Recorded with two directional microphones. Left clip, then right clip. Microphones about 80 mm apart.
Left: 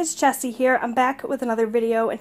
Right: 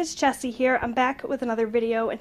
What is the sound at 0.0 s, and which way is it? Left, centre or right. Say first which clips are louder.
A woman's voice: left 3 dB; left.